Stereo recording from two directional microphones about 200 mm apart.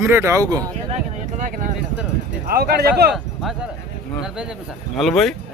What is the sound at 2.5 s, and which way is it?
Speech, 50° right (ahead or behind).